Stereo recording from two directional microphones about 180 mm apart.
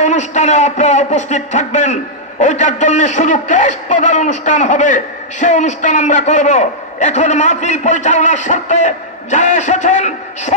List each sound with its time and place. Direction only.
0.0 s a man's voice: 40° left (ahead or behind)